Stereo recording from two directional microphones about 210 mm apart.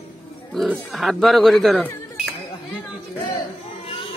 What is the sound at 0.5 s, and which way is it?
Speech, centre (ahead or behind).